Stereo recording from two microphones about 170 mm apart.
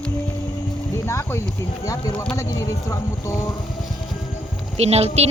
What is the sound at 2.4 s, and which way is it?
Speech, 20° left (ahead or behind).